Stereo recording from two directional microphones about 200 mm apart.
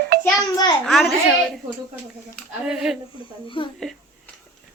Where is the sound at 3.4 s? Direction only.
25° left (ahead or behind).